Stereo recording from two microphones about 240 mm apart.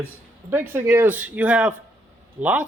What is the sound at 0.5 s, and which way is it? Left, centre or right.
A man's voice, centre.